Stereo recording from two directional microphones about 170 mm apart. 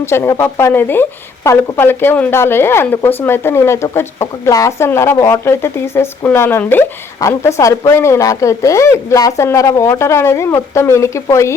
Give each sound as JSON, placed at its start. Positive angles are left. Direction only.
{"t": 0.0, "sound": "speech", "side_deg": 15}